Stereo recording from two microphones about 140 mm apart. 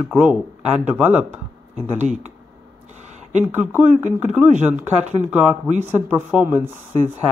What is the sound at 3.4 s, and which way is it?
Speech, 10° right (ahead or behind).